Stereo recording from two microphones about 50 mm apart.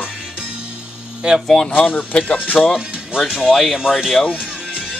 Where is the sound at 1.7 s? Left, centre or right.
Left.